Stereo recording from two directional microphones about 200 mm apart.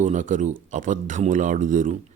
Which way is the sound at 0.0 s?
40° right (ahead or behind).